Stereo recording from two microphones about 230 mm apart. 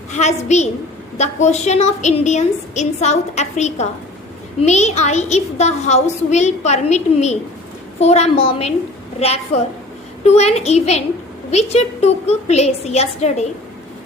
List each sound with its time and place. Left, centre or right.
0.1 s a woman's voice: left